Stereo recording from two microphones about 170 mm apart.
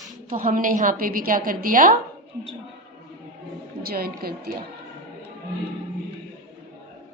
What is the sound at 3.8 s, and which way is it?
Speech, 60° right (ahead or behind).